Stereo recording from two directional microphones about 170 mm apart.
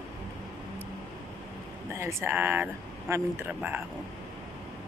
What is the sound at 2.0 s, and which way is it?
Speech, 15° right (ahead or behind).